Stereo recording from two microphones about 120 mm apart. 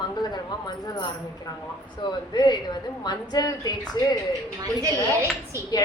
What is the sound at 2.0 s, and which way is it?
A woman's voice, 35° left (ahead or behind).